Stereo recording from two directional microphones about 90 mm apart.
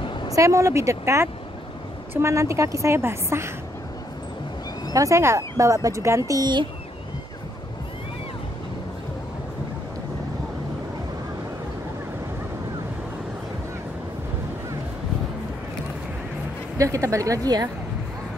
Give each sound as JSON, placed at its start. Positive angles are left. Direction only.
{"t": 0.0, "sound": "a sound", "side_deg": 60}
{"t": 0.3, "sound": "speech", "side_deg": -35}
{"t": 4.9, "sound": "speech", "side_deg": -35}
{"t": 16.7, "sound": "speech", "side_deg": -35}